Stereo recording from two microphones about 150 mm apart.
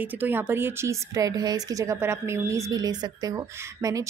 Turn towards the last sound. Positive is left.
turn(degrees=-20)  # may be behind; listen again after turning